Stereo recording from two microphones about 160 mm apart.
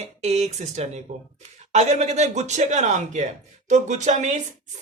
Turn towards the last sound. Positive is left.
turn(degrees=-45)  # may be behind; listen again after turning